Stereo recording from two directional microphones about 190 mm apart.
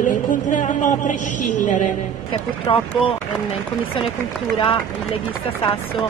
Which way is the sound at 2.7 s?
25° left (ahead or behind).